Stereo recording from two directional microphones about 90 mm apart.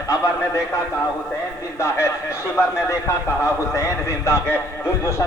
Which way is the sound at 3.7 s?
35° left (ahead or behind).